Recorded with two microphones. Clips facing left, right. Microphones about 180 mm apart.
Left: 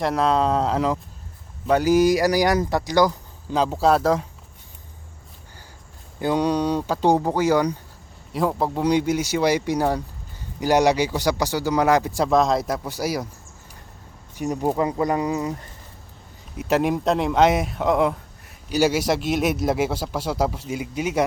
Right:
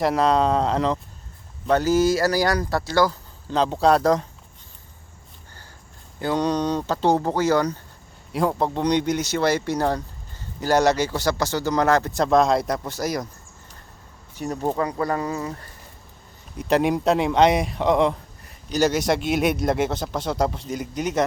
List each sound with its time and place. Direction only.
0.0 s speech: centre (ahead or behind)
6.1 s speech: 15° left (ahead or behind)
8.3 s speech: centre (ahead or behind)
14.3 s speech: 10° left (ahead or behind)
16.6 s speech: 5° left (ahead or behind)